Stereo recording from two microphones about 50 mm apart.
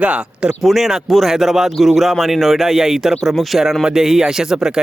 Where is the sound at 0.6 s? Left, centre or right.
Centre.